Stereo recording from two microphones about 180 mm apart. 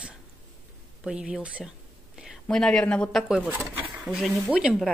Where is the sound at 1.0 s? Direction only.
5° right (ahead or behind).